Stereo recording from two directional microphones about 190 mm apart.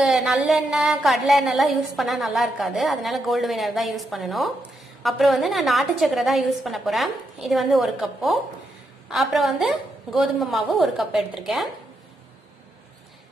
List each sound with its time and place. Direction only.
0.0 s a woman's voice: centre (ahead or behind)